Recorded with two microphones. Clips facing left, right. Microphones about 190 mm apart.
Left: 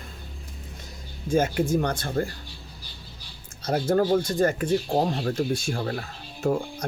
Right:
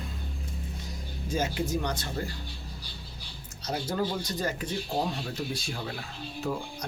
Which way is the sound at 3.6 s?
55° left (ahead or behind).